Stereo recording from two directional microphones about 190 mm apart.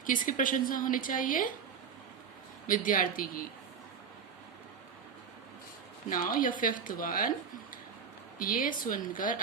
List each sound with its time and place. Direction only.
0.0 s a woman's voice: 45° left (ahead or behind)
2.6 s a woman's voice: 45° left (ahead or behind)
6.1 s a woman's voice: 45° left (ahead or behind)